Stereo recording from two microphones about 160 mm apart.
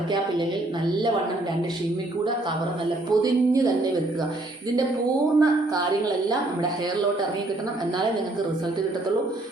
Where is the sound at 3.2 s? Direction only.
20° right (ahead or behind).